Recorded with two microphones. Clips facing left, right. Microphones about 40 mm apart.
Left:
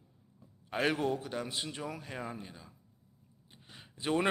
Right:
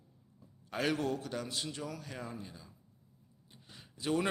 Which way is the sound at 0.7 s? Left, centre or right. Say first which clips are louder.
Left 2 dB; left.